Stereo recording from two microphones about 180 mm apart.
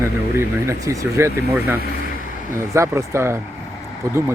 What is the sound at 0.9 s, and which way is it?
Speech, 15° right (ahead or behind).